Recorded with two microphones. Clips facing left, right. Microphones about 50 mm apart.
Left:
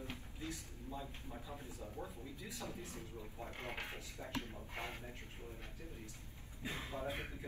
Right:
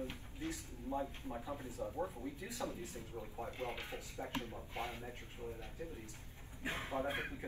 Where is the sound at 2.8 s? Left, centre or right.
Left.